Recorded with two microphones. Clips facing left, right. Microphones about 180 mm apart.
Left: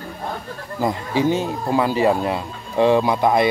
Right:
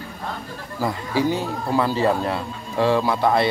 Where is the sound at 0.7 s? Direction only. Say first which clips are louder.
Left 2 dB; 20° left (ahead or behind).